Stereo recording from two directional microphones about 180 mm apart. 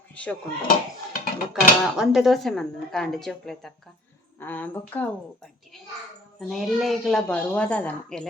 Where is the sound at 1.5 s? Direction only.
Centre (ahead or behind).